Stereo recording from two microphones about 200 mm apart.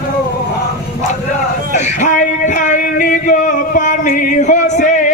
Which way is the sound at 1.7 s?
35° left (ahead or behind).